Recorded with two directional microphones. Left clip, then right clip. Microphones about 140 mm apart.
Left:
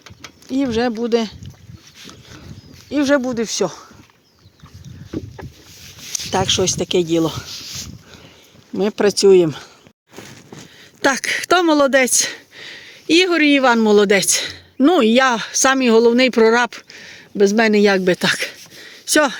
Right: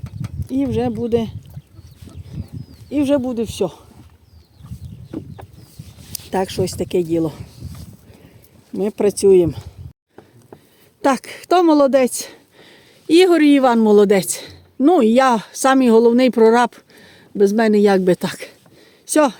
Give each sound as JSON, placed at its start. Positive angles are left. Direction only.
{"t": 0.5, "sound": "speech", "side_deg": -15}
{"t": 3.2, "sound": "speech", "side_deg": 20}
{"t": 5.8, "sound": "a sound", "side_deg": -35}
{"t": 6.3, "sound": "a woman's voice", "side_deg": -15}
{"t": 8.8, "sound": "a woman's voice", "side_deg": 0}
{"t": 11.0, "sound": "a woman's voice", "side_deg": 0}
{"t": 12.5, "sound": "speech", "side_deg": -10}